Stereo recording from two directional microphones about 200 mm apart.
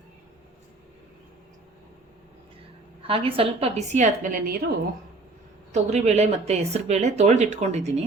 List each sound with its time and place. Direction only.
3.1 s speech: 25° right (ahead or behind)
5.7 s speech: 35° right (ahead or behind)